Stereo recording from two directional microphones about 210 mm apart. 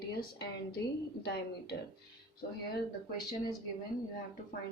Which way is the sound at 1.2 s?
55° left (ahead or behind).